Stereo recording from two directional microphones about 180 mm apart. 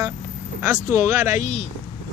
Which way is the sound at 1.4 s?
40° left (ahead or behind).